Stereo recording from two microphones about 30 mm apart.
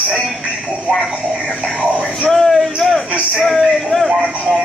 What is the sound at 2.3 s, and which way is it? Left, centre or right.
Speech, centre.